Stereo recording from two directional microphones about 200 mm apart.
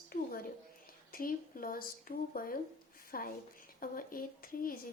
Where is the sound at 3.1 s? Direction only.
45° left (ahead or behind).